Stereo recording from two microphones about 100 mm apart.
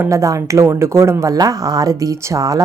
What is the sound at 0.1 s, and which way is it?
Speech, 30° right (ahead or behind).